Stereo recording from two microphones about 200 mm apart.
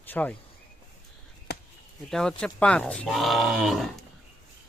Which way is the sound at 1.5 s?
55° left (ahead or behind).